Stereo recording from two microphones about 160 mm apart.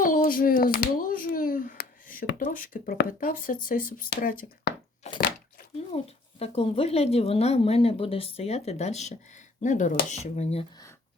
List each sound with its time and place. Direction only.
0.0 s speech: 60° left (ahead or behind)
5.0 s a sound: 45° left (ahead or behind)
5.9 s speech: 40° left (ahead or behind)